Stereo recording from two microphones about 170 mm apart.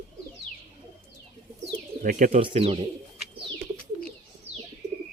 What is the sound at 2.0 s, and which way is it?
Bird, 55° right (ahead or behind).